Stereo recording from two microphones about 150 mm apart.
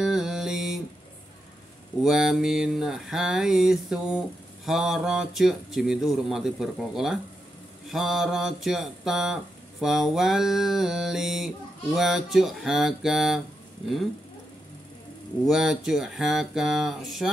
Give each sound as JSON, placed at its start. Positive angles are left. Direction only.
{"t": 0.0, "sound": "mantra", "side_deg": -5}
{"t": 2.0, "sound": "mantra", "side_deg": -5}
{"t": 15.4, "sound": "mantra", "side_deg": -5}